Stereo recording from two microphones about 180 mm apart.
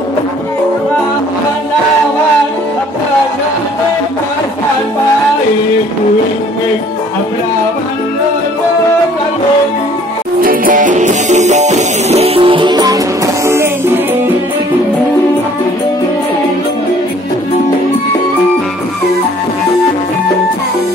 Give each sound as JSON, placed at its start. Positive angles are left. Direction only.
{"t": 10.4, "sound": "music", "side_deg": -50}